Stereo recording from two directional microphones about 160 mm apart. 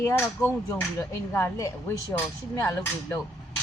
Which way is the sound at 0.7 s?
15° left (ahead or behind).